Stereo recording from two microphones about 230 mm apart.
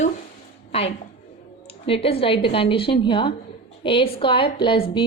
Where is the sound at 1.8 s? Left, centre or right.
Left.